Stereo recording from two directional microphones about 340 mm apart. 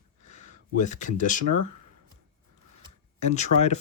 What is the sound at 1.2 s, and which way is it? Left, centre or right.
Speech, left.